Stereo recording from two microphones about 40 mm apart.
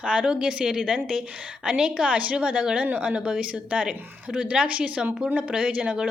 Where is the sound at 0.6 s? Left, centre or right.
Centre.